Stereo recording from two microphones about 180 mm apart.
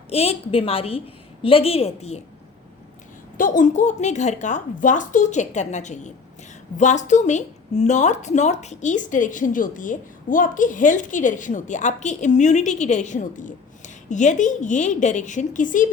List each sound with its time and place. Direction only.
0.1 s a woman's voice: 35° left (ahead or behind)
3.3 s a woman's voice: 45° left (ahead or behind)